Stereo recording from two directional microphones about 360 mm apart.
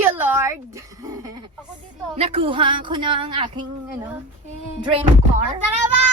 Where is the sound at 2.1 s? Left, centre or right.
Centre.